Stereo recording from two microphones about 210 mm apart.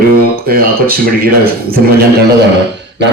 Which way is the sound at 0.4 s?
45° right (ahead or behind).